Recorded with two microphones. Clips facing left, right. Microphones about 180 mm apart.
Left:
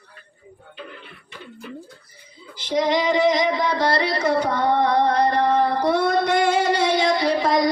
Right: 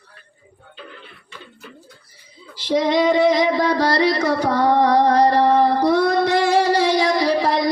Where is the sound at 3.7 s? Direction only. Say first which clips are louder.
Right 4 dB; 40° right (ahead or behind).